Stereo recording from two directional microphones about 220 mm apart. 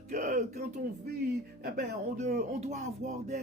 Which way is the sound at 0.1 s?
35° right (ahead or behind).